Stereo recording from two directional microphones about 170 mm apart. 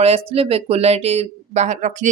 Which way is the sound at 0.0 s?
35° right (ahead or behind).